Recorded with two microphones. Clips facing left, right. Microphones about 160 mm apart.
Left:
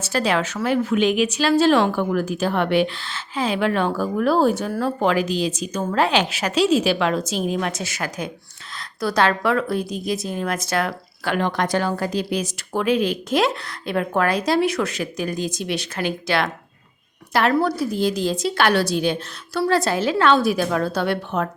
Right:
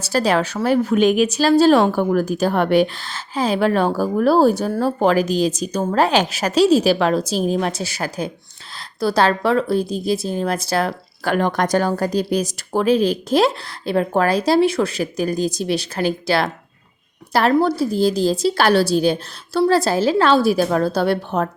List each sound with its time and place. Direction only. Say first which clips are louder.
0.0 s a woman's voice: right 3 dB; 40° right (ahead or behind)
17.5 s a woman's voice: right 4 dB; 25° right (ahead or behind)